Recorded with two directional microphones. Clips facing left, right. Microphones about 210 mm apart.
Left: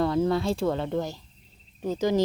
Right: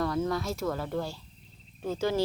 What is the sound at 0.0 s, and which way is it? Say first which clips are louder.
Speech: left 5 dB; 25° left (ahead or behind).